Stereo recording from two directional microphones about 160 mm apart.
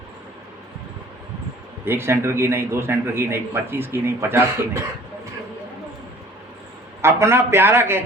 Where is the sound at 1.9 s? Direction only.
15° right (ahead or behind).